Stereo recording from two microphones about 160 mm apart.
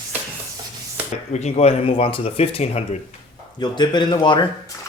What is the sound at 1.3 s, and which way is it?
Speech, 45° left (ahead or behind).